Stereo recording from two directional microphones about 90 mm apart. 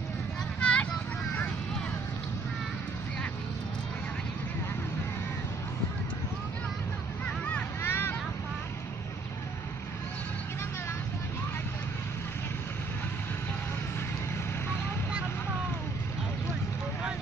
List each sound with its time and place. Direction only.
0.6 s vehicle: 15° left (ahead or behind)
7.2 s vehicle: 15° left (ahead or behind)
7.9 s vehicle: 25° left (ahead or behind)